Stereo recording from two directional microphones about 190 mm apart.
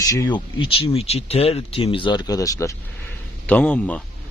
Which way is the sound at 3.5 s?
5° left (ahead or behind).